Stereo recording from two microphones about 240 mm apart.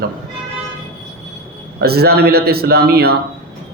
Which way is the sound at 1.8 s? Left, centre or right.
Right.